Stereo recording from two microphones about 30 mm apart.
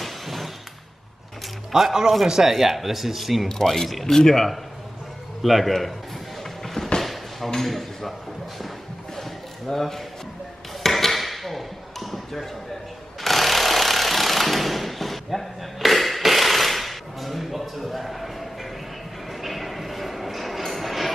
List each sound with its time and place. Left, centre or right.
0.0 s a sound: centre
1.7 s speech: right
2.4 s speech: centre
3.4 s speech: centre
5.4 s a man's voice: centre
6.6 s a sound: centre
7.6 s speech: centre
9.1 s a sound: centre
13.2 s jackhammer: centre
19.4 s train: centre